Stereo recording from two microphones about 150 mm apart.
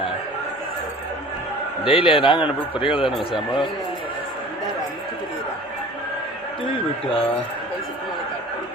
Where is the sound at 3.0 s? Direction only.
Centre (ahead or behind).